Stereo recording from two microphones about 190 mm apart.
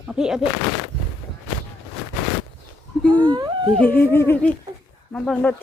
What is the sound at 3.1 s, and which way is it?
Whimper, 20° right (ahead or behind).